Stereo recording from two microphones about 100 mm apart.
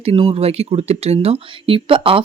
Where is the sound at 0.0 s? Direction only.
75° right (ahead or behind).